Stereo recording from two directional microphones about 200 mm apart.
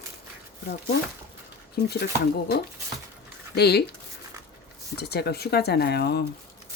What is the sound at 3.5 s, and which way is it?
Speech, 55° left (ahead or behind).